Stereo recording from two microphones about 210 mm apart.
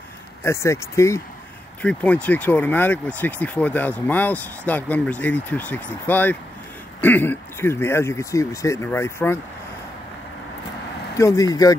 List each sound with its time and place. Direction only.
0.4 s speech: 15° left (ahead or behind)
11.1 s speech: 15° left (ahead or behind)